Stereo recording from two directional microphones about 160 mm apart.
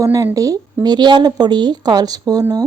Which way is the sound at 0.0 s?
20° right (ahead or behind).